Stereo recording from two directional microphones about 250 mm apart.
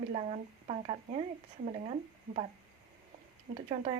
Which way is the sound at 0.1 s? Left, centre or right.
Right.